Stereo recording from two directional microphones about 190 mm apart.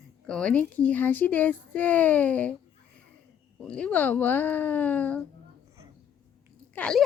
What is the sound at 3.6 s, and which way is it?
A woman's voice, 5° left (ahead or behind).